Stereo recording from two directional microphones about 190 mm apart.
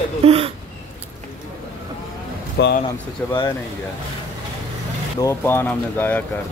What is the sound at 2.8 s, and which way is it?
Speech, 25° left (ahead or behind).